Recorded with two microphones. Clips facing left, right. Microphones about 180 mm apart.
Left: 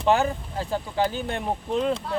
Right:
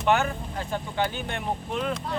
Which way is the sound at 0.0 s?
30° left (ahead or behind).